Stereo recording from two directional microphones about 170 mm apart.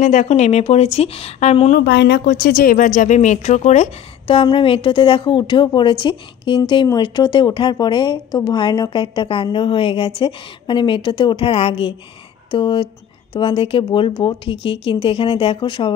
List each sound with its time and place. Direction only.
0.0 s speech: 45° left (ahead or behind)
1.8 s speech: 85° left
2.4 s a woman's voice: 55° left (ahead or behind)
4.3 s a woman's voice: 30° left (ahead or behind)